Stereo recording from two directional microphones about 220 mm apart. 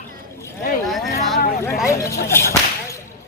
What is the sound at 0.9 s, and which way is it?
Speech, centre (ahead or behind).